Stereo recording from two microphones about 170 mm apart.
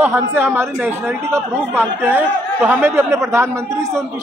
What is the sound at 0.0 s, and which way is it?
A woman's voice, 15° right (ahead or behind).